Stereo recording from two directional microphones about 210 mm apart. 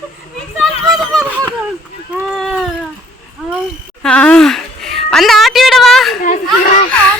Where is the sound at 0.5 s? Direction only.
5° right (ahead or behind).